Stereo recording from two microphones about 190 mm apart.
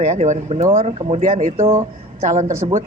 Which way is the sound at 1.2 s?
45° right (ahead or behind).